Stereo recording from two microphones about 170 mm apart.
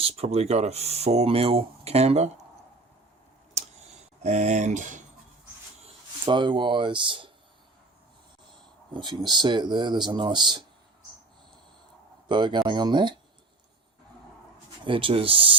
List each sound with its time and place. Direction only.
0.0 s speech: 40° right (ahead or behind)
3.5 s a sound: 40° right (ahead or behind)
5.8 s speech: 25° right (ahead or behind)
8.9 s speech: 25° right (ahead or behind)
12.3 s speech: 25° right (ahead or behind)
14.8 s speech: 30° right (ahead or behind)